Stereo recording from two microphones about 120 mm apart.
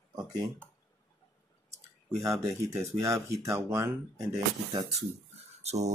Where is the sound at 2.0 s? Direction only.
30° right (ahead or behind).